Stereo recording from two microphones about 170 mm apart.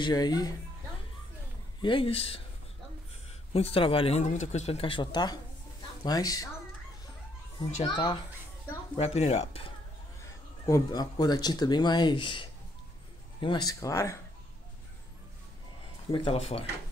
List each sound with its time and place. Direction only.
0.0 s speech: 25° left (ahead or behind)
1.8 s speech: 30° left (ahead or behind)
3.5 s speech: 35° left (ahead or behind)
7.8 s speech: 30° left (ahead or behind)
10.6 s speech: 20° left (ahead or behind)
16.1 s speech: 35° left (ahead or behind)